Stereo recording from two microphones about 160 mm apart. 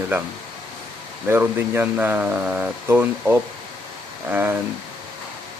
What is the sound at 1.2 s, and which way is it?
Speech, 15° right (ahead or behind).